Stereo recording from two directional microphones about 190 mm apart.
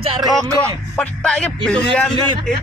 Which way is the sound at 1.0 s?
5° left (ahead or behind).